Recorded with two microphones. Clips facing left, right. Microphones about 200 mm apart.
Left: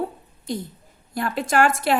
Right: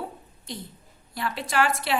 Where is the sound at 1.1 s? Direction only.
50° left (ahead or behind).